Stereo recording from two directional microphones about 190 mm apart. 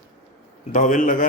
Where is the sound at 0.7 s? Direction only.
40° left (ahead or behind).